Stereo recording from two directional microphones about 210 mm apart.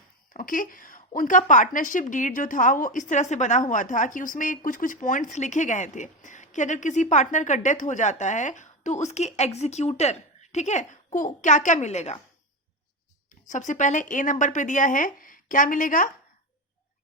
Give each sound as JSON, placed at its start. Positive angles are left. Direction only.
{"t": 0.3, "sound": "a woman's voice", "side_deg": 40}
{"t": 13.5, "sound": "a woman's voice", "side_deg": 35}